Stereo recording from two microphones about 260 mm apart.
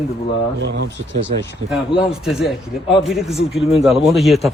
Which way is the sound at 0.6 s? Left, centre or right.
Right.